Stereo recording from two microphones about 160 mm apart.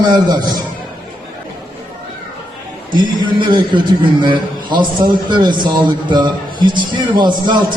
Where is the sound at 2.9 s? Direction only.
30° right (ahead or behind).